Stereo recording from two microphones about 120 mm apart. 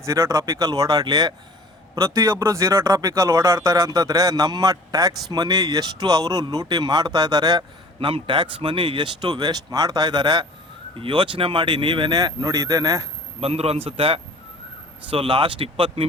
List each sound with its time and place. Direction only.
0.0 s speech: 25° right (ahead or behind)
7.9 s speech: 45° right (ahead or behind); by 13.1 s 30° right (ahead or behind)
13.4 s speech: 55° right (ahead or behind)